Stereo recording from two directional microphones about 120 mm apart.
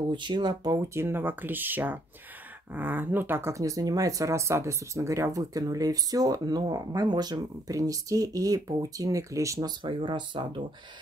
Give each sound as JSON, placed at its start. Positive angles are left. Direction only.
{"t": 0.1, "sound": "speech", "side_deg": -40}
{"t": 9.8, "sound": "speech", "side_deg": -40}